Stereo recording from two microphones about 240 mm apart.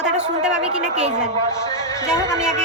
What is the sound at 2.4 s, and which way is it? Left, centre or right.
Speech, centre.